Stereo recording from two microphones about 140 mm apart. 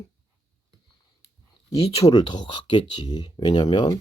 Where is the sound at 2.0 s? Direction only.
30° left (ahead or behind).